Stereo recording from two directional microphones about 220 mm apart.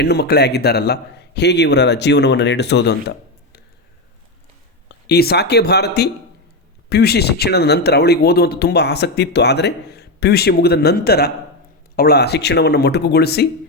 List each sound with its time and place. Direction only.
0.0 s speech: 50° left (ahead or behind)
5.0 s speech: 45° left (ahead or behind)